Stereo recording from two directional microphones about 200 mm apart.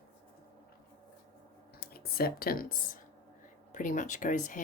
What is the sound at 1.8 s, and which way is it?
Speech, 50° left (ahead or behind).